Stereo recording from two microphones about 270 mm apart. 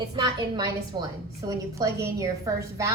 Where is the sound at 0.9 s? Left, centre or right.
Centre.